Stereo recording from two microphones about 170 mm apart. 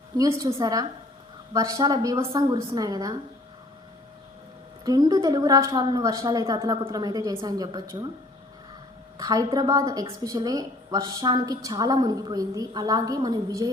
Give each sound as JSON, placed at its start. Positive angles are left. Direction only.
{"t": 0.2, "sound": "a woman's voice", "side_deg": -20}
{"t": 4.9, "sound": "a woman's voice", "side_deg": -25}
{"t": 9.1, "sound": "a woman's voice", "side_deg": -20}